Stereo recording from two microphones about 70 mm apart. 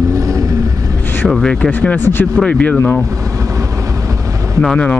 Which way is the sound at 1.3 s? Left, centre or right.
Centre.